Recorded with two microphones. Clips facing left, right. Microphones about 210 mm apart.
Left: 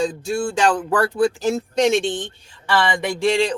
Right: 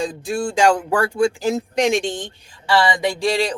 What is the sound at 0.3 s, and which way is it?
Speech, 15° right (ahead or behind).